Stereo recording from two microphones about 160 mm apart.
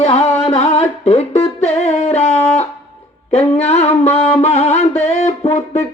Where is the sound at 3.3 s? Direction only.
40° left (ahead or behind).